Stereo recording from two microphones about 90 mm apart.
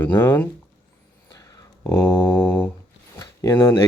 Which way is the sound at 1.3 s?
40° left (ahead or behind).